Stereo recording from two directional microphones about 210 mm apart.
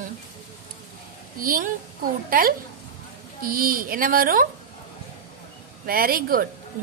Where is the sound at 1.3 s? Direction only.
45° right (ahead or behind).